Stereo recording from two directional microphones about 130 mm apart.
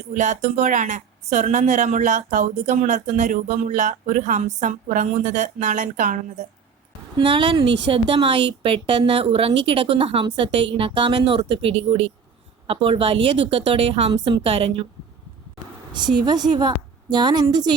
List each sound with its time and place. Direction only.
0.2 s speech: 70° right (ahead or behind); by 6.5 s 85° right
7.2 s a woman's voice: 40° right (ahead or behind)
15.9 s a woman's voice: 35° right (ahead or behind)